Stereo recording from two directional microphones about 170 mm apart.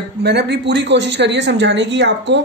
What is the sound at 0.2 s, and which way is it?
A woman's voice, 80° right.